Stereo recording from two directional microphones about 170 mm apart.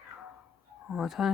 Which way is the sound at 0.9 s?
Centre (ahead or behind).